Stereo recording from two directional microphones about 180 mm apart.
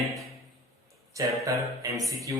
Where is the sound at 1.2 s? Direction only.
15° right (ahead or behind).